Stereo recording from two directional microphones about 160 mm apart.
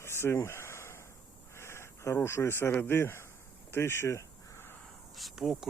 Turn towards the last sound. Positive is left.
turn(degrees=-5)  # may be behind; listen again after turning